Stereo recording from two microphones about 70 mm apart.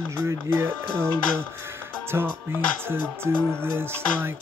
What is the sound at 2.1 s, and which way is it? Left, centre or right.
Music, right.